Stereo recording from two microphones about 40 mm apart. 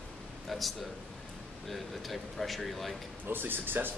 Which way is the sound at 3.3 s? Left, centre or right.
Right.